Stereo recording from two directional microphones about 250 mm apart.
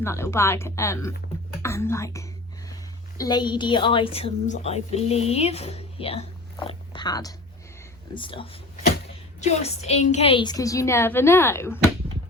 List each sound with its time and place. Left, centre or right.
0.0 s a woman's voice: centre